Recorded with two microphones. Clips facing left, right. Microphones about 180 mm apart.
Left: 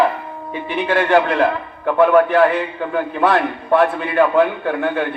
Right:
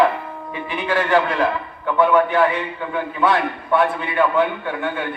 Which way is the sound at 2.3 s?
45° left (ahead or behind).